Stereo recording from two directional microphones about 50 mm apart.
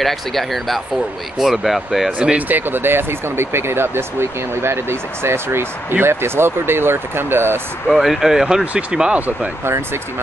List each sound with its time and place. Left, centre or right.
0.0 s speech: centre
2.1 s speech: right
7.9 s speech: centre; by 9.5 s right